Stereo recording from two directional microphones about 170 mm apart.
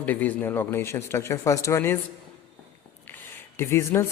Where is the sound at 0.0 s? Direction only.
10° left (ahead or behind).